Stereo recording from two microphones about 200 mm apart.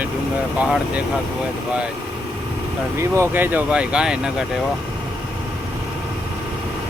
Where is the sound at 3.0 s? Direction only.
10° right (ahead or behind).